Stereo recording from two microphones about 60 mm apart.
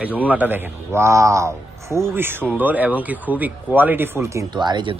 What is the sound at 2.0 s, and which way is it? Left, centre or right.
Speech, right.